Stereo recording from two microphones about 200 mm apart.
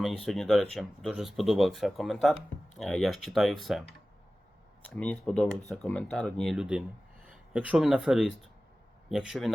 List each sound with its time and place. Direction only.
0.2 s speech: centre (ahead or behind)